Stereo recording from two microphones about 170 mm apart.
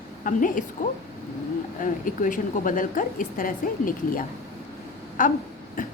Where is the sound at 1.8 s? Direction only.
50° left (ahead or behind).